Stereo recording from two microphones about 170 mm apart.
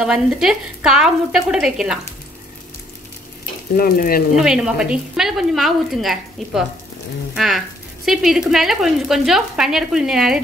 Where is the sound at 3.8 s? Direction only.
60° left (ahead or behind).